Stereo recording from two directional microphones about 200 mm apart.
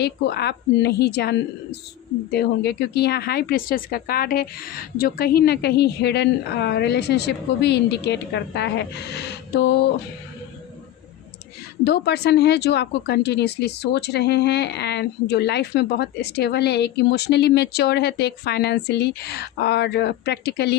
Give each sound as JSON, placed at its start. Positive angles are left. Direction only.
{"t": 0.0, "sound": "speech", "side_deg": 55}
{"t": 11.8, "sound": "speech", "side_deg": 55}